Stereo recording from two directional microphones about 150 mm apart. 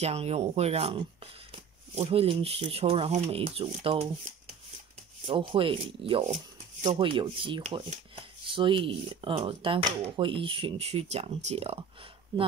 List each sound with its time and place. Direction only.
0.0 s speech: 45° right (ahead or behind)
5.5 s speech: 35° right (ahead or behind)